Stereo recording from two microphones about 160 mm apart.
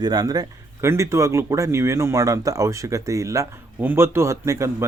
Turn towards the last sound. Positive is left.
turn(degrees=-20)  # may be behind; listen again after turning